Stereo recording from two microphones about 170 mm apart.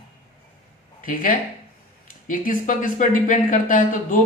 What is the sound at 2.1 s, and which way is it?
Speech, 50° left (ahead or behind).